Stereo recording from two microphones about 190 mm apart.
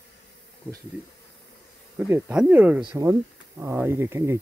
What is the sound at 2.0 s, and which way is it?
Speech, 10° right (ahead or behind).